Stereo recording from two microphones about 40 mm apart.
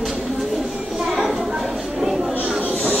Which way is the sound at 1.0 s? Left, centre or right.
Centre.